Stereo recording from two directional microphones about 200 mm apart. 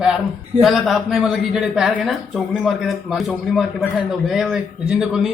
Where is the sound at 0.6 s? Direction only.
Centre (ahead or behind).